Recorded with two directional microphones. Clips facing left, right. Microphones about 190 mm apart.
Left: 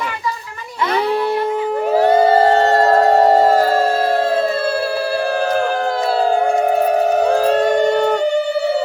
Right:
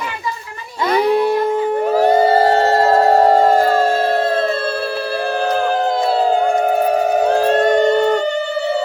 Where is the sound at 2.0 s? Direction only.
10° right (ahead or behind); by 6.2 s 5° left (ahead or behind).